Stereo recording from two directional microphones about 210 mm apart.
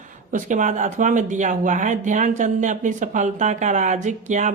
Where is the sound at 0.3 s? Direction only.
35° right (ahead or behind).